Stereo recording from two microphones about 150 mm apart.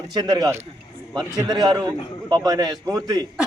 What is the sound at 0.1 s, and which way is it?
A man's voice, 25° right (ahead or behind).